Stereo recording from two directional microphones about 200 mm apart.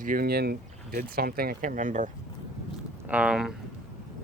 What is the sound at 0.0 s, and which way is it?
Speech, 45° right (ahead or behind).